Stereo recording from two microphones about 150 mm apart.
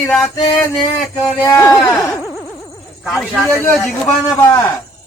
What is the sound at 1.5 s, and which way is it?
Speech, 20° left (ahead or behind).